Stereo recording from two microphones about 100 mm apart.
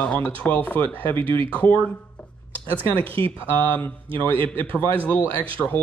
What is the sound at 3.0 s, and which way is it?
Speech, 65° right (ahead or behind).